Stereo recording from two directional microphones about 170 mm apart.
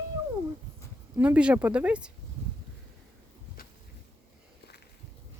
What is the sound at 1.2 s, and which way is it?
Speech, 10° right (ahead or behind).